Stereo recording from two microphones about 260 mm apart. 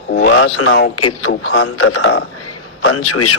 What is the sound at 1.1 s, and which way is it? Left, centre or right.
A man's voice, left.